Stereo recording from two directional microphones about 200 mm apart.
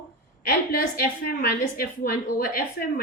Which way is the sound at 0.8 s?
45° left (ahead or behind).